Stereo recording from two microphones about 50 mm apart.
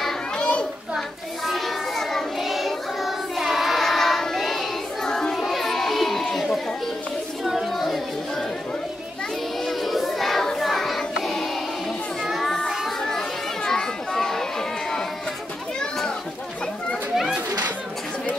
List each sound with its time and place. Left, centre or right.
0.4 s children playing: left
0.9 s children playing: centre
2.4 s child singing: centre
5.4 s music: centre
7.4 s a sound: centre
9.7 s child singing: centre
12.2 s music: centre
13.7 s children playing: centre